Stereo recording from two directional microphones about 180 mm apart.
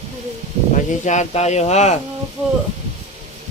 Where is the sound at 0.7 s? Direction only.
40° left (ahead or behind).